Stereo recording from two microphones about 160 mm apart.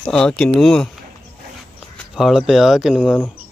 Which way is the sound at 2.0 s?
Centre (ahead or behind).